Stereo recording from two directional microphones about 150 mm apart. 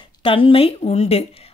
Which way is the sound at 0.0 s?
35° left (ahead or behind).